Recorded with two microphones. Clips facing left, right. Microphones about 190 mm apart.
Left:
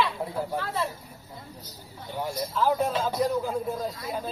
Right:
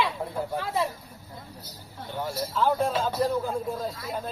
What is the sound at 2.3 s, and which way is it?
Speech, 5° left (ahead or behind).